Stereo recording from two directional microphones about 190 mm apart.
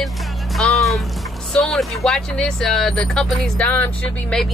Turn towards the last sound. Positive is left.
turn(degrees=5)  # may be behind; listen again after turning